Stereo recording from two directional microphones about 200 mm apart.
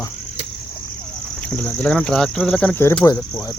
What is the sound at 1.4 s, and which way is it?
Speech, 5° left (ahead or behind).